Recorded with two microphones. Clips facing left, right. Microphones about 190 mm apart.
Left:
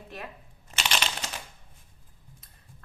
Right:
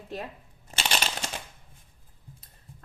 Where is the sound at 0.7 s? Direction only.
30° right (ahead or behind).